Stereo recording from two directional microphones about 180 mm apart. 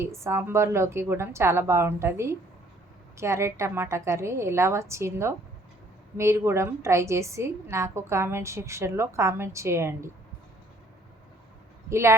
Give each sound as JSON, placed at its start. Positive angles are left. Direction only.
{"t": 0.0, "sound": "a woman's voice", "side_deg": -15}
{"t": 11.9, "sound": "speech", "side_deg": -15}